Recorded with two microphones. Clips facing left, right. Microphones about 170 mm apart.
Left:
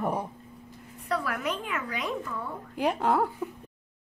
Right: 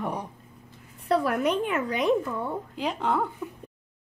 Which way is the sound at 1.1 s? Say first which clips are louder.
Right 7 dB; 25° right (ahead or behind).